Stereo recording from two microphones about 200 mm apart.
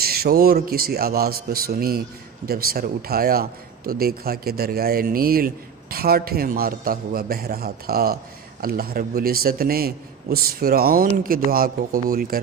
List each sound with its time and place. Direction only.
0.0 s a man's voice: 50° right (ahead or behind)